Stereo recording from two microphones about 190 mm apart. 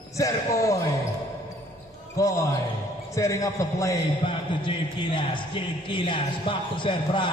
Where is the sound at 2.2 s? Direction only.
15° left (ahead or behind).